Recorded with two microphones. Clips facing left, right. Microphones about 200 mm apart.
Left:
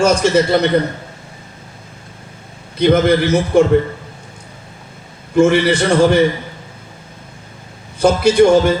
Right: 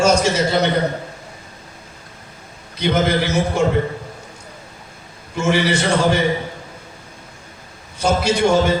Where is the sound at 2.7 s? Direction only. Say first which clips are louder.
Left 6 dB; 55° left (ahead or behind).